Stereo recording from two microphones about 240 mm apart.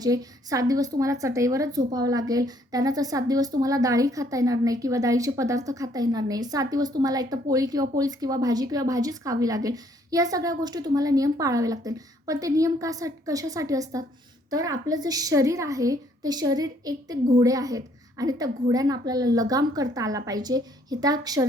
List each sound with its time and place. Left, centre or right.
0.0 s a woman's voice: centre